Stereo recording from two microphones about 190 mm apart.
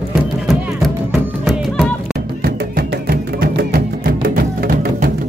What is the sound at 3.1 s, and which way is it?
Music, 55° right (ahead or behind).